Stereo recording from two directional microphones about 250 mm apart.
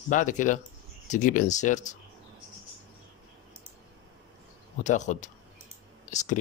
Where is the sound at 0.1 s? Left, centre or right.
Left.